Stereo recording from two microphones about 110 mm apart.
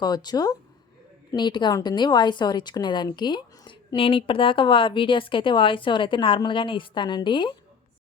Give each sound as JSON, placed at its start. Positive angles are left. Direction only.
{"t": 0.0, "sound": "speech", "side_deg": 40}